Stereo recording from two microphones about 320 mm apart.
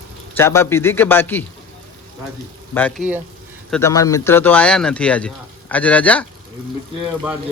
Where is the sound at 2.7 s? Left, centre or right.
Centre.